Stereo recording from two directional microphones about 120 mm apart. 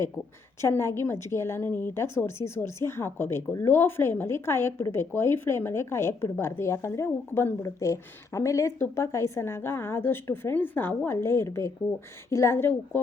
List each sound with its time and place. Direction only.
0.6 s a woman's voice: 20° left (ahead or behind)